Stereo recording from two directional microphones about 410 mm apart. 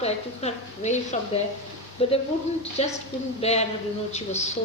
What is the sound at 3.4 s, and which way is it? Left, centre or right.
A woman's voice, centre.